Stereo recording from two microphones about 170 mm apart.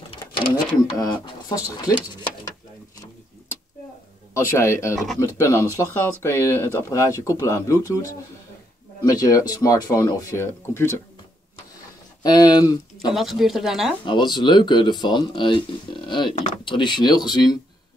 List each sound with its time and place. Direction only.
0.1 s cash register: 30° left (ahead or behind)
0.9 s speech: 25° left (ahead or behind)
4.3 s speech: 15° left (ahead or behind)
12.2 s speech: 25° left (ahead or behind)
13.1 s speech: centre (ahead or behind)
14.0 s speech: 25° left (ahead or behind)